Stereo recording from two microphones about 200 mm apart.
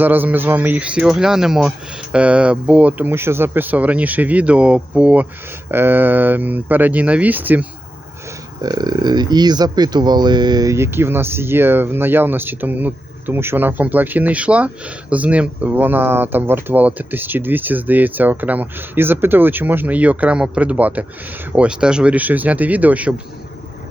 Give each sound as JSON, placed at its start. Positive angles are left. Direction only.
{"t": 0.0, "sound": "speech", "side_deg": -10}
{"t": 8.6, "sound": "speech", "side_deg": -20}